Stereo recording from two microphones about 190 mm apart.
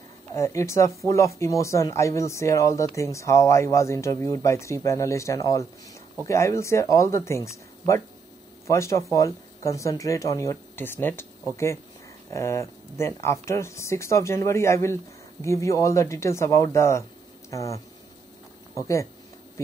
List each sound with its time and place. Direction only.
0.3 s speech: 15° left (ahead or behind)
18.8 s speech: 15° left (ahead or behind)